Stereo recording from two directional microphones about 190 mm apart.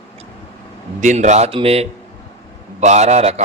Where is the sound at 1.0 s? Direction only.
40° right (ahead or behind).